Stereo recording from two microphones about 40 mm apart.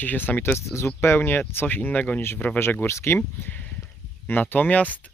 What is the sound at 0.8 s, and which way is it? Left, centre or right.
Speech, left.